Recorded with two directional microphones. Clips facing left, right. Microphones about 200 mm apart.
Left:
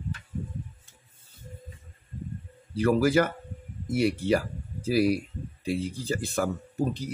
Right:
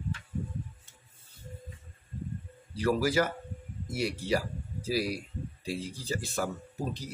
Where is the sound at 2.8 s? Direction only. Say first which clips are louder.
Left 5 dB; 55° left (ahead or behind).